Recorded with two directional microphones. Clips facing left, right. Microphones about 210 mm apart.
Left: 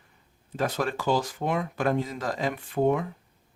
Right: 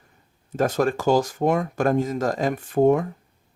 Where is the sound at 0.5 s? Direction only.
45° right (ahead or behind).